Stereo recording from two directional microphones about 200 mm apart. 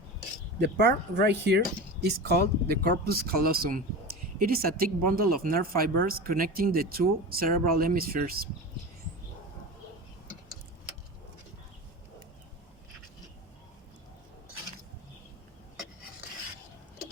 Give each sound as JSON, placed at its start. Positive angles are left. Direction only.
{"t": 0.6, "sound": "speech", "side_deg": -55}